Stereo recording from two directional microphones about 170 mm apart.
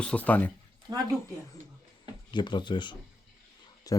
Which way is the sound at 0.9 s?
25° right (ahead or behind).